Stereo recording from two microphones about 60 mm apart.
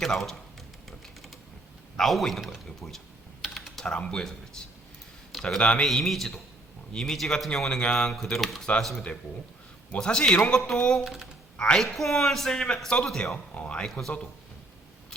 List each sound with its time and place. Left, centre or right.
0.0 s speech: centre
2.0 s speech: centre
3.4 s typing: centre
3.9 s speech: centre
5.4 s speech: centre
8.1 s speech: centre
11.0 s speech: centre
11.5 s a woman's voice: centre
11.8 s speech: centre; by 13.8 s left